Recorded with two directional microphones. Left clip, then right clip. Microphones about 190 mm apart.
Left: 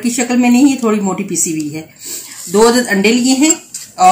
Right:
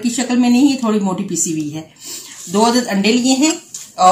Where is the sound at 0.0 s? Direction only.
10° right (ahead or behind).